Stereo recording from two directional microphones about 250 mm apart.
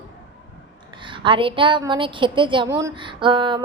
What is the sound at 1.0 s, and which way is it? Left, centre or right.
A woman's voice, centre.